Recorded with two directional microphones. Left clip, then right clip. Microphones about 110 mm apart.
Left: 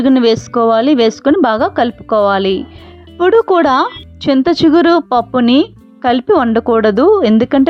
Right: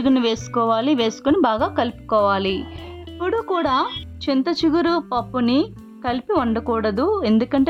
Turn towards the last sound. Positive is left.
turn(degrees=55)  # may be behind; listen again after turning